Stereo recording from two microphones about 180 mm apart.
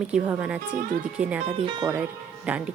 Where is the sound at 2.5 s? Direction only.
5° right (ahead or behind).